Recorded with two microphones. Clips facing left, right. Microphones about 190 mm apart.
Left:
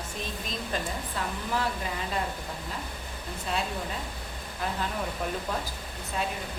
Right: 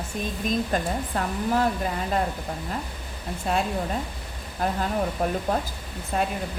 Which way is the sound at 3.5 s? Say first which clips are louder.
Right 6 dB; 50° right (ahead or behind).